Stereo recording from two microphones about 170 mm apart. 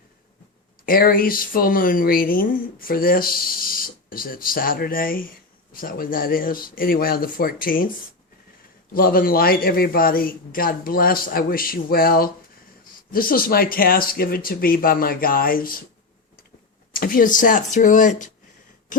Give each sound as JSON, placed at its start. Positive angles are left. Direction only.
{"t": 0.9, "sound": "speech", "side_deg": 60}
{"t": 8.9, "sound": "speech", "side_deg": 60}
{"t": 16.9, "sound": "speech", "side_deg": 60}
{"t": 18.9, "sound": "cough", "side_deg": 50}